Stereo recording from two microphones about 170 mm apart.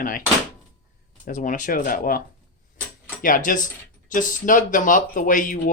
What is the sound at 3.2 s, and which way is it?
Speech, 50° left (ahead or behind).